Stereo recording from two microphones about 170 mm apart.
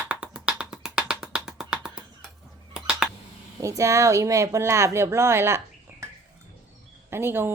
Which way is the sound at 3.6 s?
20° right (ahead or behind).